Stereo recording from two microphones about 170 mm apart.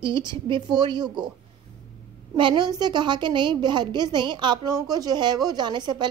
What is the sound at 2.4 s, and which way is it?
A woman's voice, 25° right (ahead or behind).